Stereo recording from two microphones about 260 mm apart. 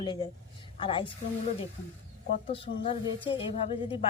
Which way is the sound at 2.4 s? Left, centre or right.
Left.